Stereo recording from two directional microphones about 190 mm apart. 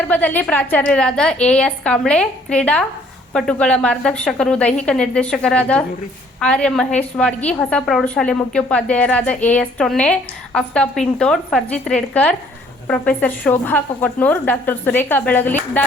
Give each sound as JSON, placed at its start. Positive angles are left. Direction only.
{"t": 0.1, "sound": "a woman's voice", "side_deg": 10}